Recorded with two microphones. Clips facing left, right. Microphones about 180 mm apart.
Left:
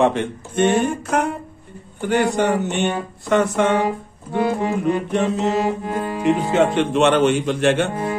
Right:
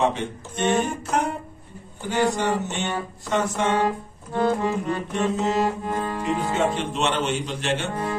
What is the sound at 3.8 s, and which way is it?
Music, 15° left (ahead or behind).